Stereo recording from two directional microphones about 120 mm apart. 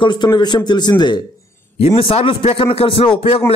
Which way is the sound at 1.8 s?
50° left (ahead or behind).